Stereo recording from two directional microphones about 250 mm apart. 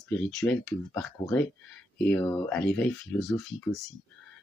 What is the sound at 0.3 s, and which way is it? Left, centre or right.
Speech, centre.